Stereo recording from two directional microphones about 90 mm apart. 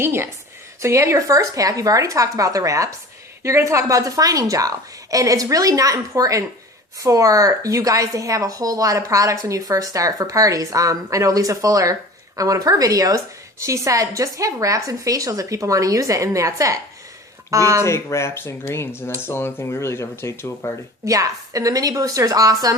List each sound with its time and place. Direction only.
0.0 s a woman's voice: 25° right (ahead or behind)
17.8 s speech: 30° left (ahead or behind)
21.0 s a woman's voice: 40° right (ahead or behind)